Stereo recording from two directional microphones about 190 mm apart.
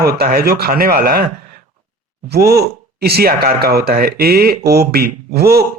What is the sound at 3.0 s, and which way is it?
Speech, 55° right (ahead or behind).